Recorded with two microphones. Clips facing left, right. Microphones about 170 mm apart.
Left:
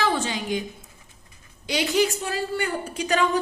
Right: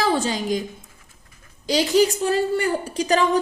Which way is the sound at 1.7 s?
35° right (ahead or behind).